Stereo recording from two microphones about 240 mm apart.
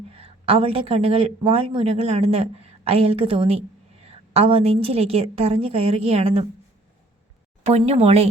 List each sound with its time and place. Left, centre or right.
0.1 s a woman's voice: right
7.6 s a woman's voice: right